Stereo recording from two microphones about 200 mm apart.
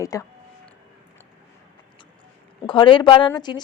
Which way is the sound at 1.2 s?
10° left (ahead or behind).